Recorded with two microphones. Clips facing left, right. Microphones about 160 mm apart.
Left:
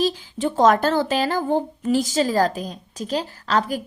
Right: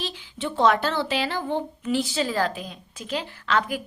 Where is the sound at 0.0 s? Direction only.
40° left (ahead or behind).